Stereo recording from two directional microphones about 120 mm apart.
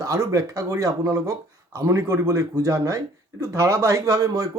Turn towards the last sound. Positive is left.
turn(degrees=-30)  # may be behind; listen again after turning